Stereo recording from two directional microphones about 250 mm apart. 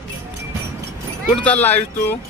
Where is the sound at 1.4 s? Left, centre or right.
Centre.